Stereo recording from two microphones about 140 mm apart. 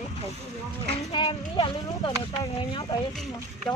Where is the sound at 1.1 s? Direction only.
35° left (ahead or behind).